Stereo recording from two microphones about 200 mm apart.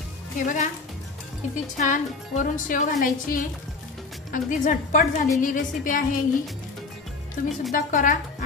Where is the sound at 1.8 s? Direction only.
40° left (ahead or behind).